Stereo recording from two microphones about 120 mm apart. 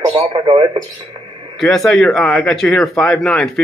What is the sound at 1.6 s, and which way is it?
Speech, 5° left (ahead or behind).